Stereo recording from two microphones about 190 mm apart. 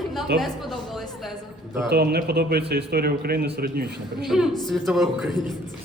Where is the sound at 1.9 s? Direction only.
55° right (ahead or behind).